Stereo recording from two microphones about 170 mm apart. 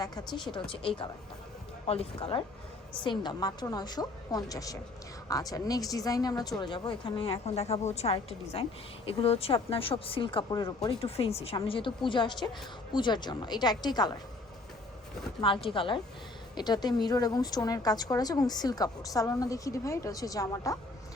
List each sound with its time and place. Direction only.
0.0 s a woman's voice: 20° left (ahead or behind)
15.4 s a woman's voice: 30° left (ahead or behind)